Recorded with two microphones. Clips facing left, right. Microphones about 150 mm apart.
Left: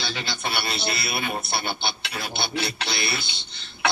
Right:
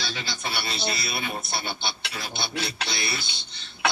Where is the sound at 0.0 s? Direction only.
60° left (ahead or behind).